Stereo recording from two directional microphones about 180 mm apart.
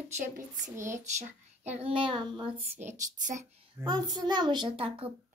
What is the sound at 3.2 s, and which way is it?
Speech, 40° right (ahead or behind).